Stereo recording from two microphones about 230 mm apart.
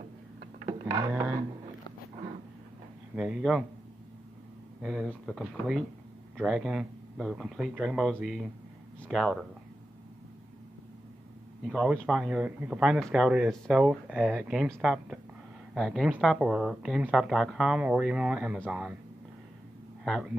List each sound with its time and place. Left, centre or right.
0.7 s a sound: centre
3.2 s speech: centre
4.8 s speech: centre
11.6 s speech: centre
20.1 s speech: centre